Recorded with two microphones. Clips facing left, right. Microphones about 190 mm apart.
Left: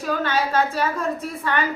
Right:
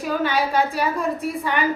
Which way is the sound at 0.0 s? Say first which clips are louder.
Right 1 dB; 10° right (ahead or behind).